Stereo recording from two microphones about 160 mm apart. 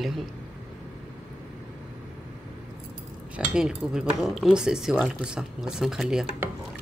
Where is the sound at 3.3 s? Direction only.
5° right (ahead or behind).